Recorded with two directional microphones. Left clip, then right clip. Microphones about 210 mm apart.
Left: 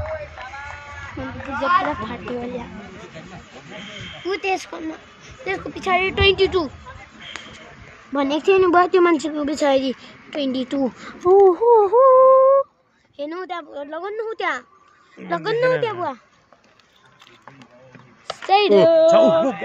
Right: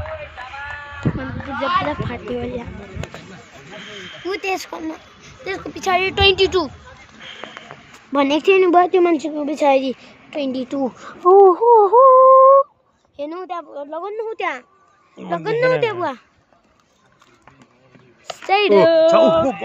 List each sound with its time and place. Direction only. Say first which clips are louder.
1.2 s speech: left 2 dB; 15° right (ahead or behind)
2.0 s speech: right 2 dB; 25° right (ahead or behind)
3.7 s snake: right 1 dB; 5° left (ahead or behind)
4.3 s speech: even; 25° right (ahead or behind)
8.1 s a woman's voice: right 3 dB; 45° right (ahead or behind)
8.5 s speech: right 1 dB; 15° right (ahead or behind)
9.0 s a woman's voice: even; centre (ahead or behind)
11.4 s wail: right 3 dB; centre (ahead or behind)
13.1 s a woman's voice: right 1 dB; 5° right (ahead or behind)
15.1 s speech: right 1 dB; 20° right (ahead or behind)
15.8 s a woman's voice: right 3 dB; 50° right (ahead or behind)
18.3 s a sound: even; 20° right (ahead or behind)
19.0 s a woman's voice: right 1 dB; centre (ahead or behind)